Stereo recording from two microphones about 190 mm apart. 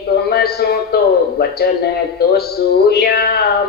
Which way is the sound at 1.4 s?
55° left (ahead or behind).